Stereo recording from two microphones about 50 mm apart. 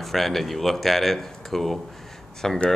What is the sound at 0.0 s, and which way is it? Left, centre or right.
Speech, centre.